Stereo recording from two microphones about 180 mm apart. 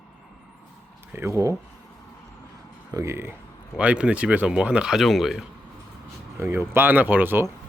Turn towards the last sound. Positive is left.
turn(degrees=-10)  # may be behind; listen again after turning